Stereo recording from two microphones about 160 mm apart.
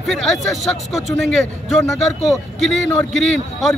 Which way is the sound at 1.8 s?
20° left (ahead or behind).